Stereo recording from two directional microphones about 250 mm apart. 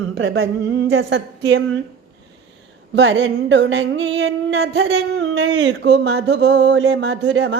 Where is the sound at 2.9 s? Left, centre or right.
Right.